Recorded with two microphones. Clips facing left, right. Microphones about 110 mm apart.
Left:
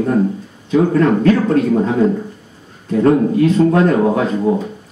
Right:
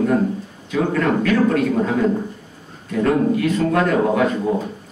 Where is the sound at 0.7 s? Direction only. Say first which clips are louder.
Left 6 dB; 30° left (ahead or behind).